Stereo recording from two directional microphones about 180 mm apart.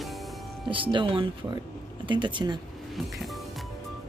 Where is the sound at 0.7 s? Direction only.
30° right (ahead or behind).